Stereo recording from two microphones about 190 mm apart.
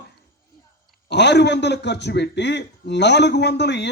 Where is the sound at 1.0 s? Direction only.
65° left (ahead or behind).